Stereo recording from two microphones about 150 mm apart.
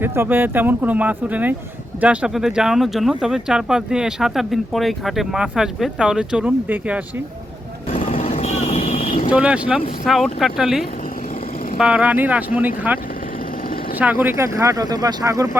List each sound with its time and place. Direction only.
0.0 s speech: 15° right (ahead or behind)
7.9 s vehicle: 40° left (ahead or behind)
9.3 s speech: 5° right (ahead or behind)
14.0 s speech: 10° right (ahead or behind)